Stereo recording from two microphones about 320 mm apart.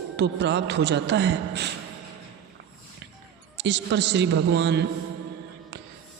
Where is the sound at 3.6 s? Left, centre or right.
Right.